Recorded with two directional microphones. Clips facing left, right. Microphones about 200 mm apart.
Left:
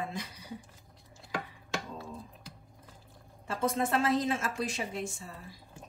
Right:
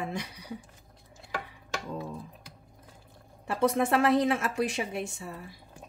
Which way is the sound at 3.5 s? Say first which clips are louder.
Right 5 dB; 65° right (ahead or behind).